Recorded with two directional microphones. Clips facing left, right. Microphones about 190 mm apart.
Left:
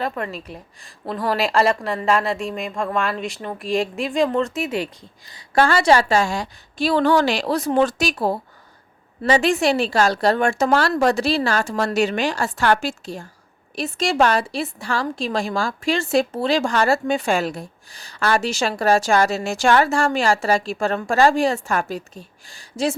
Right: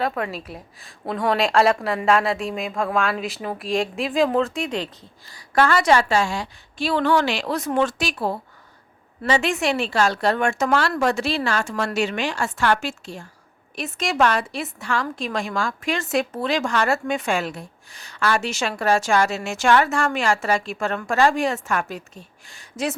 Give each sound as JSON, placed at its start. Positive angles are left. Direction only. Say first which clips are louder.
{"t": 0.0, "sound": "speech", "louder": "right 1 dB", "side_deg": 0}
{"t": 5.3, "sound": "a woman's voice", "louder": "left 1 dB", "side_deg": 30}